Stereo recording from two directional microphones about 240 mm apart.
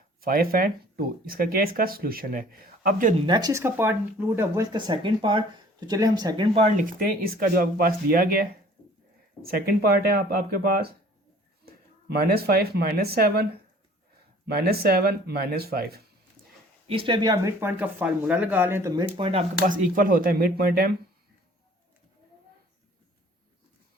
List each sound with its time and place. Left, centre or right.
0.2 s speech: right
3.2 s speech: centre; by 16.0 s right
16.8 s speech: right